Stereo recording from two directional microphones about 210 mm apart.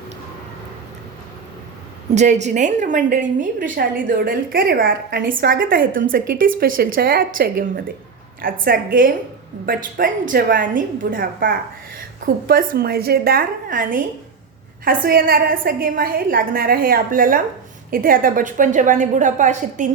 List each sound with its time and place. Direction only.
2.1 s a woman's voice: 35° right (ahead or behind)